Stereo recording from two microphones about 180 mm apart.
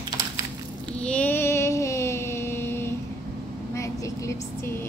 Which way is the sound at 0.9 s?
5° left (ahead or behind).